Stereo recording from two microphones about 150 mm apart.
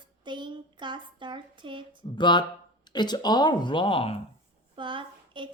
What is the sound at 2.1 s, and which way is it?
Speech, 30° left (ahead or behind).